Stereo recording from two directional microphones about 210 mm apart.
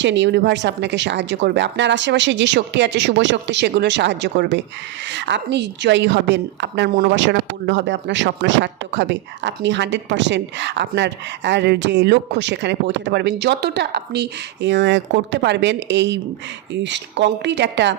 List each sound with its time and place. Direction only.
0.0 s a woman's voice: 60° right (ahead or behind)